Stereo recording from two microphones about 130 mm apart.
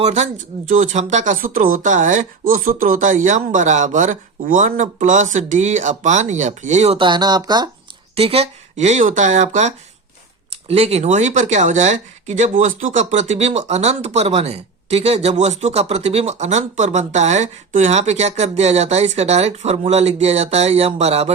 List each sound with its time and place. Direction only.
0.0 s speech: 60° right (ahead or behind)
0.7 s speech: 75° right (ahead or behind); by 7.0 s 55° right (ahead or behind)
7.0 s speech: 35° right (ahead or behind)
8.1 s speech: 50° right (ahead or behind); by 9.7 s 65° right (ahead or behind)
10.7 s speech: 50° right (ahead or behind)